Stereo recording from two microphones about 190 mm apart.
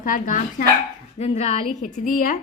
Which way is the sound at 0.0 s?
45° left (ahead or behind).